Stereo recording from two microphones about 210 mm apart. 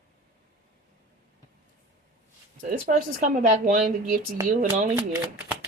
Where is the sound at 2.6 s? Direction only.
40° right (ahead or behind).